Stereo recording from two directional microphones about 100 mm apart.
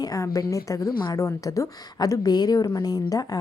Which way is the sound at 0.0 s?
35° left (ahead or behind).